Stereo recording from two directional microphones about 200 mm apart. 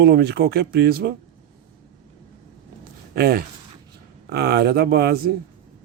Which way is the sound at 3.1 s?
50° right (ahead or behind).